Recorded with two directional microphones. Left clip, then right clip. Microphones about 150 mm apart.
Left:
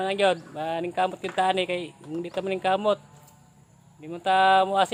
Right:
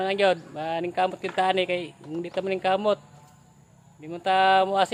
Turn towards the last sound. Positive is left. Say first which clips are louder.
# even
turn(degrees=0)  # may be behind; listen again after turning